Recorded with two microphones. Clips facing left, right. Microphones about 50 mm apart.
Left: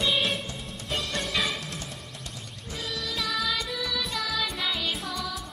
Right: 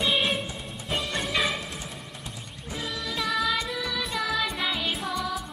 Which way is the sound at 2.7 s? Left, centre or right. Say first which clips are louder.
Right 1 dB; centre.